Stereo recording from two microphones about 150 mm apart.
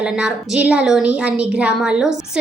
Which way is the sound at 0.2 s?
5° right (ahead or behind).